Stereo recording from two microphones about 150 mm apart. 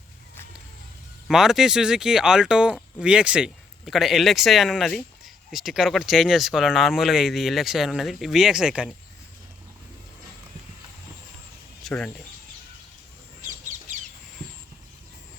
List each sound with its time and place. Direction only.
1.3 s speech: 5° right (ahead or behind)
11.8 s speech: centre (ahead or behind)
13.9 s chicken: 60° right (ahead or behind)